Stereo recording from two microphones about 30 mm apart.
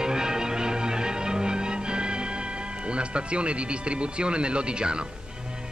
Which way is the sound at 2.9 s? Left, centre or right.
Right.